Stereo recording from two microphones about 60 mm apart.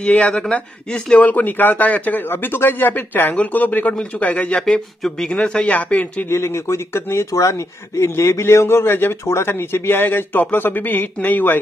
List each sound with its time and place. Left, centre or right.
0.0 s speech: centre
1.1 s a man's voice: left
4.6 s speech: centre
6.3 s a man's voice: left